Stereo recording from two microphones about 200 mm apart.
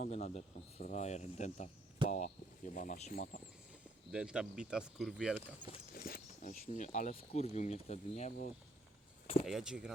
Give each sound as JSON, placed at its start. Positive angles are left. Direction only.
{"t": 0.0, "sound": "speech", "side_deg": 35}
{"t": 4.1, "sound": "speech", "side_deg": -5}
{"t": 5.9, "sound": "speech", "side_deg": 45}
{"t": 9.5, "sound": "speech", "side_deg": -5}